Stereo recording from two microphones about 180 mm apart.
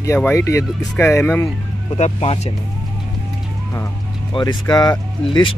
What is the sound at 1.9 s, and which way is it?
Speech, 35° left (ahead or behind).